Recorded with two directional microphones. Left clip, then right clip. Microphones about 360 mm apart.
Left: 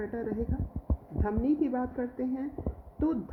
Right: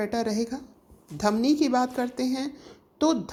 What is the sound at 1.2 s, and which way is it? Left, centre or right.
A woman's voice, centre.